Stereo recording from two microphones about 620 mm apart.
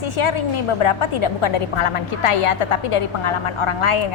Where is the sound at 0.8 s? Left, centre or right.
Left.